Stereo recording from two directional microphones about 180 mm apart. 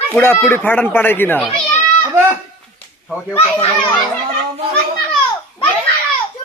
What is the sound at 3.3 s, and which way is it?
Speech, 30° left (ahead or behind).